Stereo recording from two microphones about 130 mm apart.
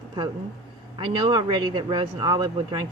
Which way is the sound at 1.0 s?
40° right (ahead or behind).